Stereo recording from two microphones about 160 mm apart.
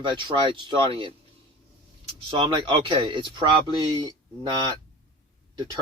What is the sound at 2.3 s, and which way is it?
Speech, 30° right (ahead or behind).